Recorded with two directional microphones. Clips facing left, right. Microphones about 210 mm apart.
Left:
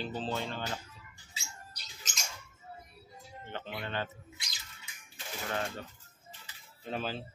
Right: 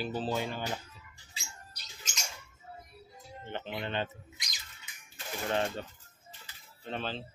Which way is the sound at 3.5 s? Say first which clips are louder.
Right 3 dB; 20° right (ahead or behind).